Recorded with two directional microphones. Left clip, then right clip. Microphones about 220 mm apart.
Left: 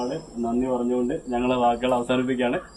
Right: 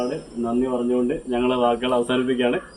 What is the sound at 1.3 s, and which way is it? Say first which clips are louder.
Speech: right 1 dB; 5° left (ahead or behind).